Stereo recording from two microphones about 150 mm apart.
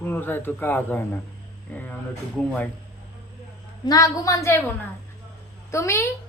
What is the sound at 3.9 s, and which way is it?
Speech, 25° left (ahead or behind).